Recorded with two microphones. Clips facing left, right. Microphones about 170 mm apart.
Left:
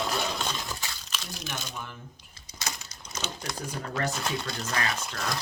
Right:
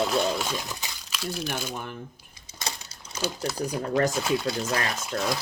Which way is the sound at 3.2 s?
5° right (ahead or behind).